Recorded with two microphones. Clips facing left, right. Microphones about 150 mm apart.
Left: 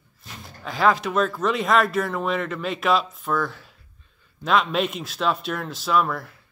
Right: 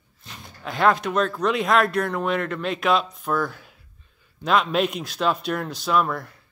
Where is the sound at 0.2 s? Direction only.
Centre (ahead or behind).